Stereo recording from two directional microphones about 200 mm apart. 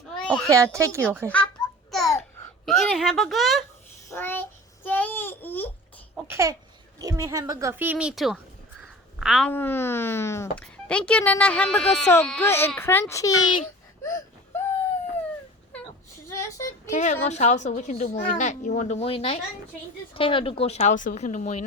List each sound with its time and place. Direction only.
0.2 s a sound: 5° left (ahead or behind)
0.4 s a woman's voice: 15° right (ahead or behind)
1.9 s babbling: centre (ahead or behind)
2.6 s a woman's voice: centre (ahead or behind)
4.1 s child singing: 10° left (ahead or behind)
6.2 s a woman's voice: 15° right (ahead or behind)
8.8 s crow: centre (ahead or behind)
9.5 s speech: 10° left (ahead or behind)
14.0 s wail: 10° left (ahead or behind)
16.3 s a sound: 15° left (ahead or behind)
16.9 s a child's voice: 35° left (ahead or behind)